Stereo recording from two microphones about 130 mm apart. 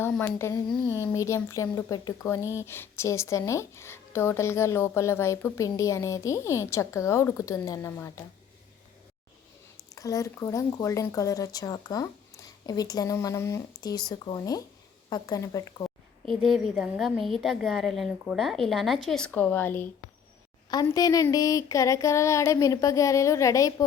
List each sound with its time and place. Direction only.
0.1 s a woman's voice: 15° left (ahead or behind)
9.7 s a woman's voice: 25° left (ahead or behind)
16.2 s a woman's voice: centre (ahead or behind)
20.8 s a woman's voice: 25° left (ahead or behind)